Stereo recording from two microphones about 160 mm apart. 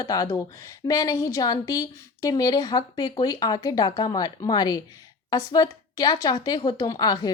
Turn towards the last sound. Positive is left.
turn(degrees=25)  # may be behind; listen again after turning